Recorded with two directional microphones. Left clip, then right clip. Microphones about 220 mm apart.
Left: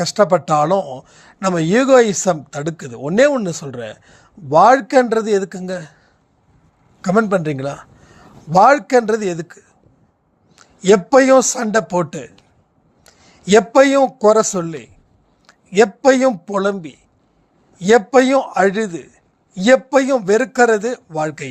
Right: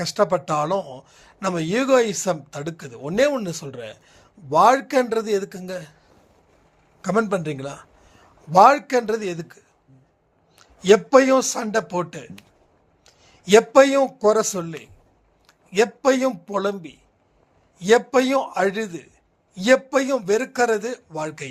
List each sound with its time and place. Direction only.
0.0 s speech: 35° left (ahead or behind)
7.0 s a man's voice: 35° left (ahead or behind)